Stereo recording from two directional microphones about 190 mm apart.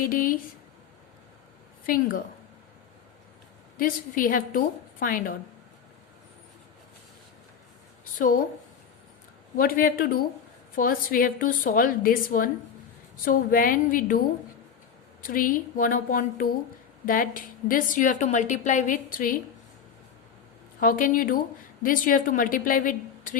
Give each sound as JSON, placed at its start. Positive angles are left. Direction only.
{"t": 0.0, "sound": "speech", "side_deg": 50}
{"t": 1.9, "sound": "speech", "side_deg": 50}
{"t": 3.8, "sound": "speech", "side_deg": 45}
{"t": 8.2, "sound": "speech", "side_deg": 45}
{"t": 9.6, "sound": "speech", "side_deg": 50}
{"t": 20.7, "sound": "speech", "side_deg": 45}